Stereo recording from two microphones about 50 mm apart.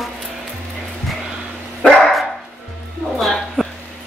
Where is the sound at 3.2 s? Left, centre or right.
Centre.